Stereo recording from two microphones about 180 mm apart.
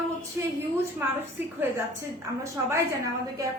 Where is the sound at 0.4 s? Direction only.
15° right (ahead or behind).